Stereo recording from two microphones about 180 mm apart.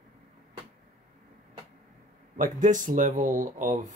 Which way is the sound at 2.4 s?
45° right (ahead or behind).